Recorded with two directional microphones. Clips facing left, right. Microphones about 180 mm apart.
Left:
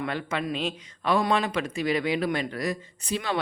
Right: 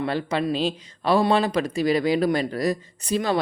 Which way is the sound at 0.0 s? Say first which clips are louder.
Right 5 dB; 35° right (ahead or behind).